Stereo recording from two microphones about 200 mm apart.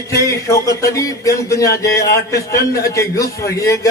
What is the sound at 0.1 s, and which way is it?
A man's voice, 15° left (ahead or behind).